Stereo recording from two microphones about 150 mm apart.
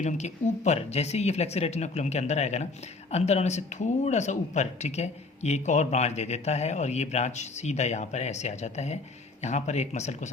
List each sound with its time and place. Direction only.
0.0 s speech: 50° left (ahead or behind)